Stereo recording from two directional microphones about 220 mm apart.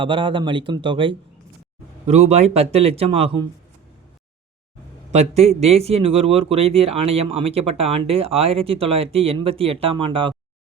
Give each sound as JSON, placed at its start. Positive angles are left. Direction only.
{"t": 0.0, "sound": "speech", "side_deg": -20}
{"t": 5.1, "sound": "speech", "side_deg": -30}